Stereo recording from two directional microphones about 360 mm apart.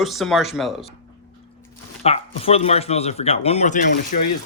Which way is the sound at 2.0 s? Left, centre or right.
Centre.